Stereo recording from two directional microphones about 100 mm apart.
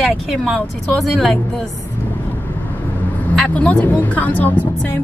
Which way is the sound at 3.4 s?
10° left (ahead or behind).